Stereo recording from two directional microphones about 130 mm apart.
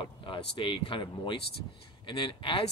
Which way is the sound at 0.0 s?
40° left (ahead or behind).